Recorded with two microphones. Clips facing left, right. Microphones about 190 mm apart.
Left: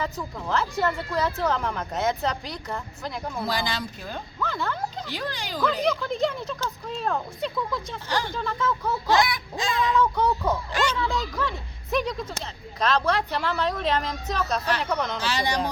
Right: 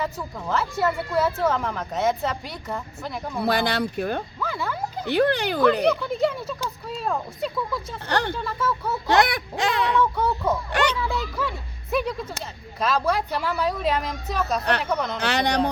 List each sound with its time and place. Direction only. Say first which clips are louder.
0.0 s a woman's voice: right 1 dB; 5° right (ahead or behind)
3.4 s speech: right 8 dB; 65° right (ahead or behind)
4.4 s a sound: even; 5° right (ahead or behind)
5.0 s speech: right 12 dB; 60° right (ahead or behind)
6.1 s a woman's voice: right 2 dB; 5° right (ahead or behind)
8.0 s speech: right 5 dB; 65° right (ahead or behind)
8.4 s a woman's voice: even; 5° right (ahead or behind)
9.0 s a sound: right 3 dB; 65° right (ahead or behind)
10.0 s a woman's voice: even; 5° right (ahead or behind)
10.7 s a sound: right 3 dB; 65° right (ahead or behind)
10.9 s speech: even; 10° right (ahead or behind)
14.6 s speech: right 3 dB; 65° right (ahead or behind)
14.8 s a woman's voice: right 1 dB; centre (ahead or behind)
15.2 s speech: right 4 dB; 65° right (ahead or behind)